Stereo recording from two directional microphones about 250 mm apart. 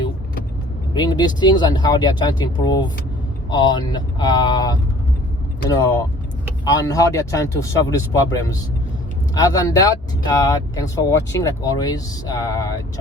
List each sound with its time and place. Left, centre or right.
0.9 s speech: centre